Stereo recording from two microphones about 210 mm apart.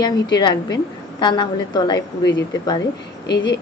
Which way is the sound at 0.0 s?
20° left (ahead or behind).